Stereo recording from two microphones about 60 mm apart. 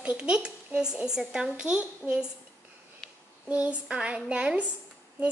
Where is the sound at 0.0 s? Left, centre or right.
Centre.